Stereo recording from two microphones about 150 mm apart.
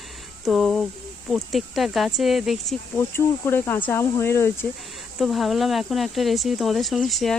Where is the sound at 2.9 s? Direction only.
15° left (ahead or behind).